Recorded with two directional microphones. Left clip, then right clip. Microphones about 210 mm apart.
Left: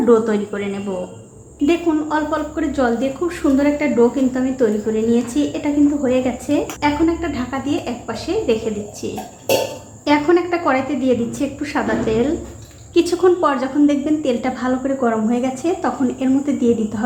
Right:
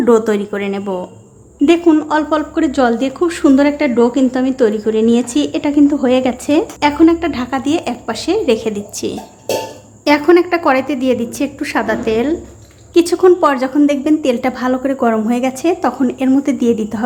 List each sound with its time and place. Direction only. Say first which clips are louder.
0.0 s a woman's voice: right 3 dB; 30° right (ahead or behind)
1.6 s a woman's voice: right 6 dB; 45° right (ahead or behind)
10.0 s a woman's voice: right 5 dB; 30° right (ahead or behind)